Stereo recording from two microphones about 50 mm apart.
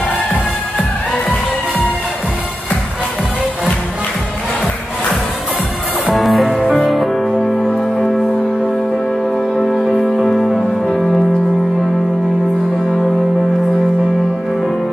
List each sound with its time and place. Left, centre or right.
6.1 s music: centre
9.6 s music: centre